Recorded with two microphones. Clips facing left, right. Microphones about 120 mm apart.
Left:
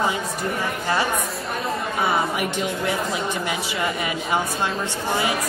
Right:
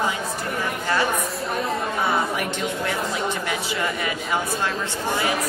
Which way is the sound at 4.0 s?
20° left (ahead or behind).